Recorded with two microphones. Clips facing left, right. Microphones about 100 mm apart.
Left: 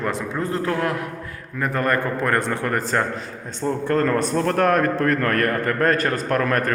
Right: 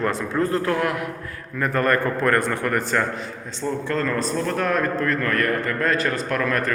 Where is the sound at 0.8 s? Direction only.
30° left (ahead or behind).